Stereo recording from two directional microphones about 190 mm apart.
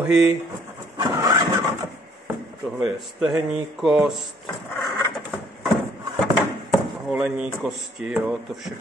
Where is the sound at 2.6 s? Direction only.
Centre (ahead or behind).